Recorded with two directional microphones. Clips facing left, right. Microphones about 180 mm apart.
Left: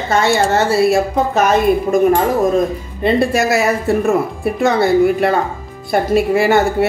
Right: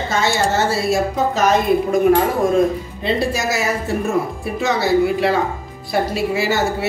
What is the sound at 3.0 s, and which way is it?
A woman's voice, 55° left (ahead or behind).